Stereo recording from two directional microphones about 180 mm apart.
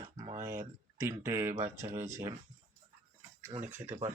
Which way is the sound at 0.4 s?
15° right (ahead or behind).